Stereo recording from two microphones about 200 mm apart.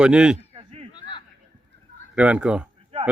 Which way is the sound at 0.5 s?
30° right (ahead or behind).